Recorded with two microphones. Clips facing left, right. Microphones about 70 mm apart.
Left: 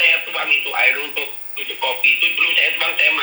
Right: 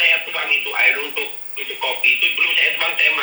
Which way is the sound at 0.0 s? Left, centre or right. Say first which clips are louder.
Left 1 dB; left.